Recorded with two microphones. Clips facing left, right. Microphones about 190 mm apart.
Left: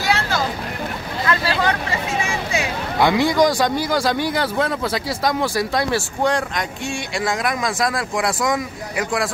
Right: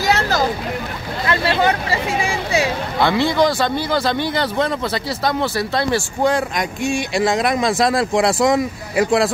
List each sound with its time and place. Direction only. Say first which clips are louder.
0.0 s vehicle: right 3 dB; 40° right (ahead or behind)
1.2 s hubbub: right 3 dB; 25° right (ahead or behind)
3.0 s speech: left 1 dB; 15° left (ahead or behind); by 6.6 s 5° right (ahead or behind)
6.8 s speech: right 9 dB; 20° right (ahead or behind)